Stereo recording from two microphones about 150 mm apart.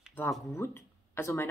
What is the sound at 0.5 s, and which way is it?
Speech, 15° left (ahead or behind).